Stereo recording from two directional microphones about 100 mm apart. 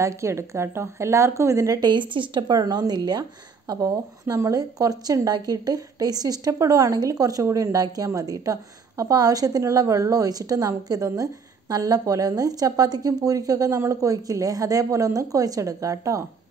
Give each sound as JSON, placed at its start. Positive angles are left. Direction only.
{"t": 0.0, "sound": "a woman's voice", "side_deg": -25}
{"t": 1.8, "sound": "speech", "side_deg": -50}